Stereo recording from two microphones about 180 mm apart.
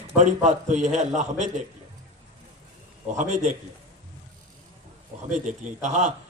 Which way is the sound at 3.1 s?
40° right (ahead or behind).